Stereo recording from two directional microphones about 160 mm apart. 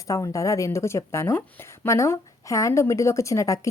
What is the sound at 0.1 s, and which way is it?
Speech, 20° left (ahead or behind).